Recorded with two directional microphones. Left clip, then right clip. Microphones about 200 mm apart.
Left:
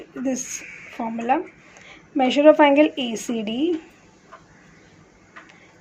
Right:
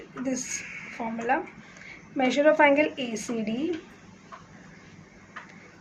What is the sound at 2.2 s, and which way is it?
A woman's voice, 30° left (ahead or behind).